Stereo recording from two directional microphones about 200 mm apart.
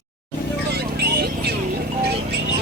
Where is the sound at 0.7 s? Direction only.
55° right (ahead or behind).